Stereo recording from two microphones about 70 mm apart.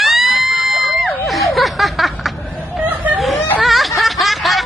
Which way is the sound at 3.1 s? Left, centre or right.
Centre.